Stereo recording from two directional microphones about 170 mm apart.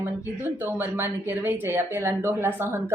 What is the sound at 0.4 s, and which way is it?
Speech, 10° right (ahead or behind).